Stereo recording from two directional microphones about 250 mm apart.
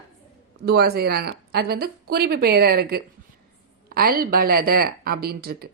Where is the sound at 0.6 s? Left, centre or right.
Right.